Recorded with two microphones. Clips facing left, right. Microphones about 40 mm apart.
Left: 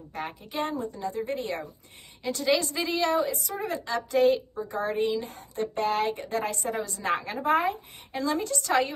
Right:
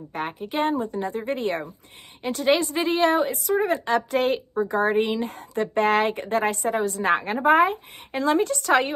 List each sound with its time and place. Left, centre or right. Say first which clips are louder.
0.1 s a woman's voice: right 6 dB; right